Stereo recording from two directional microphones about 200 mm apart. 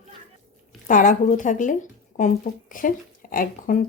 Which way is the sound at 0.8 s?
40° left (ahead or behind).